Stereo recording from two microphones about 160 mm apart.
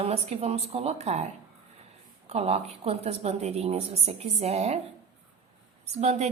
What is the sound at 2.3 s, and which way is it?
A woman's voice, 40° right (ahead or behind).